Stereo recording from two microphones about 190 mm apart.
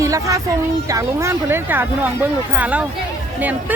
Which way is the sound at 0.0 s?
15° right (ahead or behind).